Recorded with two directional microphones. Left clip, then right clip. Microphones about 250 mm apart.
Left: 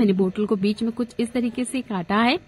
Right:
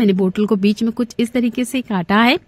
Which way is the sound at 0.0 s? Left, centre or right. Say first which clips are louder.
Right 4 dB; right.